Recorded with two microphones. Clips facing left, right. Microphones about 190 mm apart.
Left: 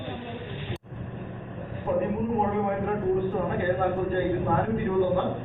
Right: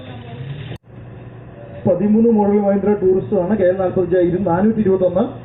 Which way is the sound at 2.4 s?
55° right (ahead or behind).